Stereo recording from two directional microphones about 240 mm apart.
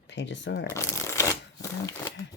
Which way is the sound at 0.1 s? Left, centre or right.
Left.